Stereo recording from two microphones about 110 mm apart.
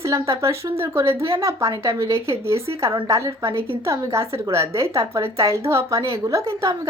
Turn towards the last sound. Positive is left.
turn(degrees=-30)  # may be behind; listen again after turning